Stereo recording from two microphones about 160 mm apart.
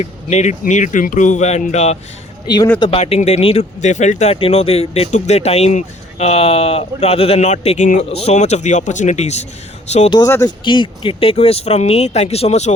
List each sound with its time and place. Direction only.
0.0 s speech: 45° left (ahead or behind)
2.7 s speech: 30° left (ahead or behind)
3.0 s speech: 40° left (ahead or behind)
10.2 s speech: 15° left (ahead or behind)
10.6 s speech: 30° left (ahead or behind)